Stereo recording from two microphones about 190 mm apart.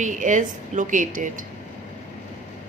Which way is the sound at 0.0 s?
40° right (ahead or behind).